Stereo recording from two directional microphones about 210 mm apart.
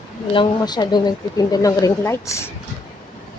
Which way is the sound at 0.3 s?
20° left (ahead or behind).